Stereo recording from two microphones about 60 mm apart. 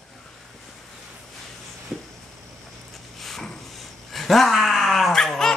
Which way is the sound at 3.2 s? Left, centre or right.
Centre.